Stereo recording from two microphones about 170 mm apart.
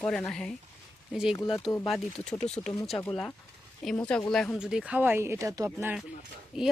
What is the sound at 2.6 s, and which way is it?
Speech, 20° left (ahead or behind).